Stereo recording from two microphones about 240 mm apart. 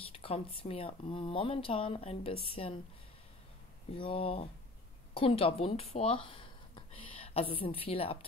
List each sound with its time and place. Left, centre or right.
0.0 s speech: left
3.9 s speech: left